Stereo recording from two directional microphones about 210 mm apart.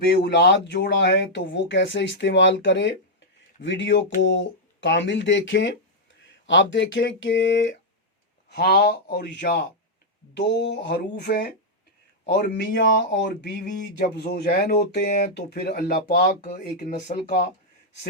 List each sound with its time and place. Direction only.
0.0 s speech: 50° left (ahead or behind)
8.4 s speech: 50° left (ahead or behind)
16.2 s speech: 35° left (ahead or behind)